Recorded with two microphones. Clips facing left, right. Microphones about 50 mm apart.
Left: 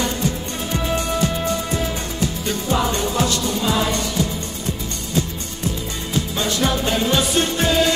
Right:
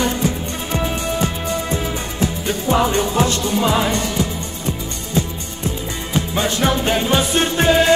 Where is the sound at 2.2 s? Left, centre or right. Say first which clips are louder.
Right 4 dB; right.